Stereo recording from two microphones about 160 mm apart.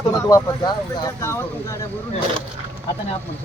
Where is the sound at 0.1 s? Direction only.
20° left (ahead or behind).